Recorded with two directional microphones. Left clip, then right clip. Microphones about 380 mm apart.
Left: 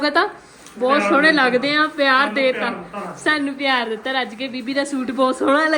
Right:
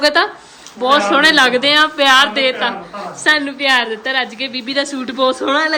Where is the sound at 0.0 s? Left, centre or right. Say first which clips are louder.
Right 5 dB; centre.